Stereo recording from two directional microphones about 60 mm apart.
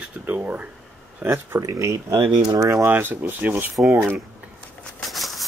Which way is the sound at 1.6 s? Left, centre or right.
Right.